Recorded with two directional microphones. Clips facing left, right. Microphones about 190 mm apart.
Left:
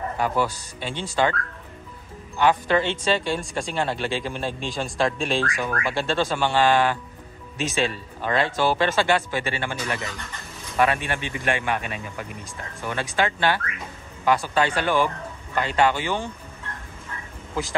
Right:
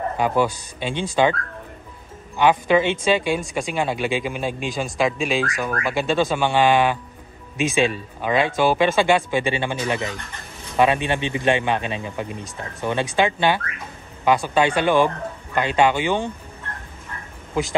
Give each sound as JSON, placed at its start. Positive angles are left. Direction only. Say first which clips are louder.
{"t": 0.2, "sound": "speech", "louder": "right 4 dB", "side_deg": -20}
{"t": 2.3, "sound": "a man's voice", "louder": "right 3 dB", "side_deg": -15}